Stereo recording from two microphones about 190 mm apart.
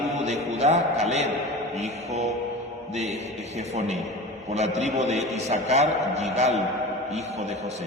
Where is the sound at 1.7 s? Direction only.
35° right (ahead or behind).